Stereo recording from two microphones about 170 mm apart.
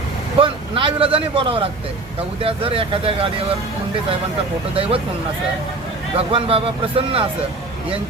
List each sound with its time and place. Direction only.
0.3 s speech: 30° right (ahead or behind)
4.7 s speech: 35° right (ahead or behind)
6.1 s speech: 35° right (ahead or behind)